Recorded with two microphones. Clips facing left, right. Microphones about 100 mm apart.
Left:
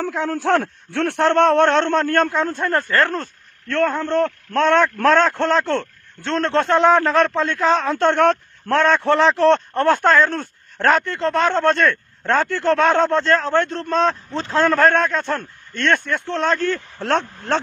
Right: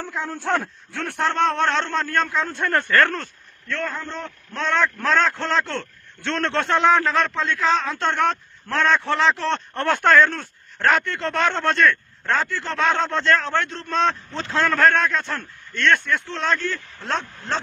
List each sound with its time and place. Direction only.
0.1 s a man's voice: 90° left; by 2.6 s 45° left (ahead or behind)
2.9 s speech: 30° left (ahead or behind)
3.6 s a man's voice: 55° left (ahead or behind); by 12.0 s 40° left (ahead or behind)
12.4 s speech: 55° left (ahead or behind)
17.0 s a man's voice: 65° left (ahead or behind)